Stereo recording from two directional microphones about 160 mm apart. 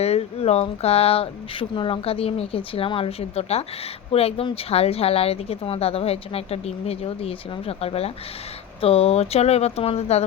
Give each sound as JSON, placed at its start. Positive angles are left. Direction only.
{"t": 0.0, "sound": "a woman's voice", "side_deg": 40}